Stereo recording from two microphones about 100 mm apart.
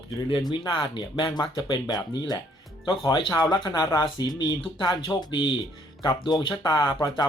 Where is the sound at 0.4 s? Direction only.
45° left (ahead or behind); by 1.3 s 60° left (ahead or behind).